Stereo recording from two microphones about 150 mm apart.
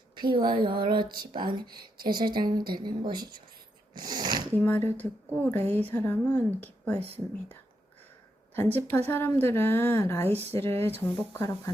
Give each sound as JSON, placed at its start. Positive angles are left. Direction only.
{"t": 0.2, "sound": "speech", "side_deg": -30}
{"t": 3.9, "sound": "a sound", "side_deg": -30}
{"t": 4.5, "sound": "a woman's voice", "side_deg": 10}
{"t": 8.5, "sound": "a woman's voice", "side_deg": 15}